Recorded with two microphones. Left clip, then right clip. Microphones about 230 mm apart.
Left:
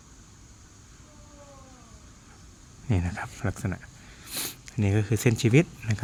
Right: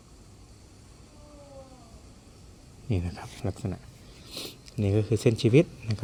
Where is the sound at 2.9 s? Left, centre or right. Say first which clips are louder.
Left 3 dB; centre.